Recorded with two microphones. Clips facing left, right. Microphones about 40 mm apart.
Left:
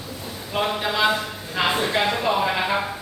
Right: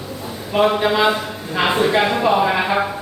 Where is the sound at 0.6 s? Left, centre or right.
Centre.